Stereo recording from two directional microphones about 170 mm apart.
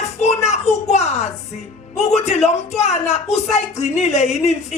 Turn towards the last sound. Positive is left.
turn(degrees=40)  # may be behind; listen again after turning